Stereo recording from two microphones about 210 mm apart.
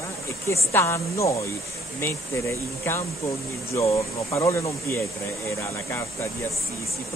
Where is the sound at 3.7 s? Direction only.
15° left (ahead or behind).